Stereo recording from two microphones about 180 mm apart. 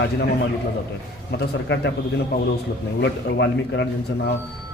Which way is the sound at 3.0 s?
75° left (ahead or behind).